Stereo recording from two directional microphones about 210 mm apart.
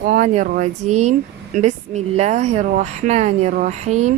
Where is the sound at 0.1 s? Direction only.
40° right (ahead or behind).